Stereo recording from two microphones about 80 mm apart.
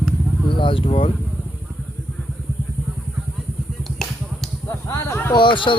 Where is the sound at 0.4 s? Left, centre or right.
Left.